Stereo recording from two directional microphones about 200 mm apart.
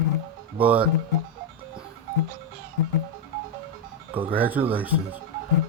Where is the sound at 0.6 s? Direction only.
5° right (ahead or behind).